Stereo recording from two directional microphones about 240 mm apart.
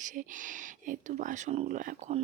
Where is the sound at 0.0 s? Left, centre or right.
Right.